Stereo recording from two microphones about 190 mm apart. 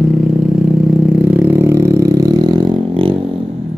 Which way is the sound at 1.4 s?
10° right (ahead or behind).